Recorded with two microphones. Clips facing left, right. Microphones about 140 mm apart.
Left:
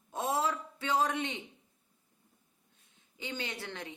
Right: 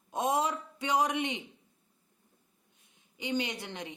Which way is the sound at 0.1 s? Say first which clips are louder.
Right 2 dB; 20° right (ahead or behind).